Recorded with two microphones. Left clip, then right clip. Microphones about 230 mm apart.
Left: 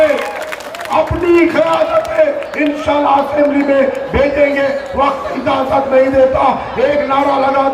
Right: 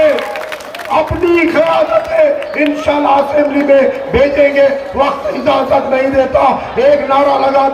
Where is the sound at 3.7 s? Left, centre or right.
Right.